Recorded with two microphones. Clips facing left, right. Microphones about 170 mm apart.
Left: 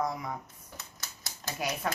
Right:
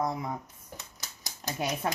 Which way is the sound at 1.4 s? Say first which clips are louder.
Right 2 dB; 20° right (ahead or behind).